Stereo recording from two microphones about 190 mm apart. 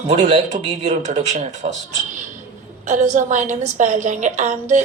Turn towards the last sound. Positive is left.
turn(degrees=-40)  # may be behind; listen again after turning